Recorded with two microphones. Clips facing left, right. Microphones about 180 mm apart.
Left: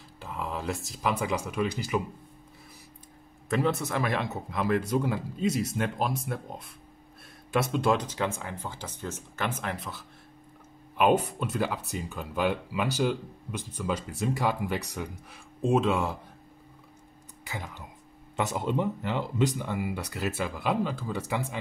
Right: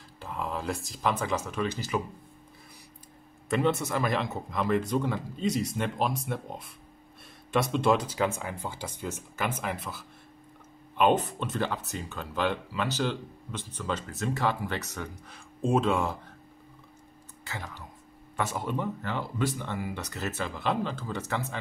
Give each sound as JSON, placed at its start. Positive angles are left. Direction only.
{"t": 0.2, "sound": "speech", "side_deg": 0}
{"t": 3.4, "sound": "speech", "side_deg": 0}
{"t": 11.0, "sound": "speech", "side_deg": 10}
{"t": 15.6, "sound": "speech", "side_deg": 0}
{"t": 17.5, "sound": "speech", "side_deg": 20}